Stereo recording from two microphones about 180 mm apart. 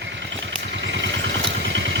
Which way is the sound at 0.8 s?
80° right.